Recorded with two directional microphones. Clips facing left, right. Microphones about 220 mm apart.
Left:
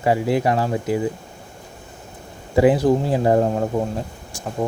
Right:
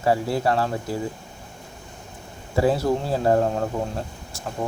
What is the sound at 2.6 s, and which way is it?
Speech, 15° left (ahead or behind).